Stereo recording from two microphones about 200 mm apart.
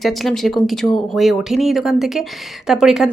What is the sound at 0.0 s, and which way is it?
Speech, centre (ahead or behind).